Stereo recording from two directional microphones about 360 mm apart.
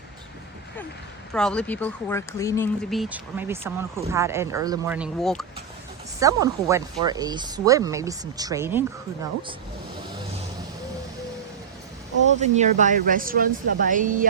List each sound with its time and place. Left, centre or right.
1.3 s speech: centre
12.4 s speech: centre